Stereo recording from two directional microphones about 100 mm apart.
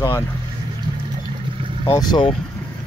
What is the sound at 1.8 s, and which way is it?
Speech, 45° left (ahead or behind).